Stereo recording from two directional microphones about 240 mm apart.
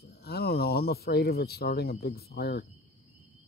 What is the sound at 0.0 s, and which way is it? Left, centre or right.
Speech, left.